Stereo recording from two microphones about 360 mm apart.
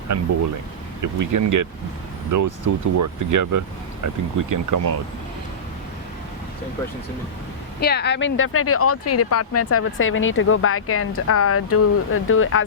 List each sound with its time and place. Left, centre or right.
0.1 s speech: right
7.8 s speech: left